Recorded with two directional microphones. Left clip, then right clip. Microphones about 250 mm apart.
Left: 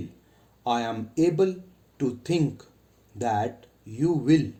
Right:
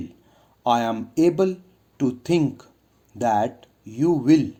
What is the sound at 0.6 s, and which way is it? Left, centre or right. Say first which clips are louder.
Speech: right 6 dB; right.